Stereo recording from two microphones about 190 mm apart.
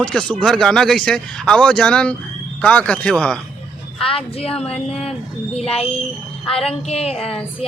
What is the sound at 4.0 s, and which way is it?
A woman's voice, 30° left (ahead or behind).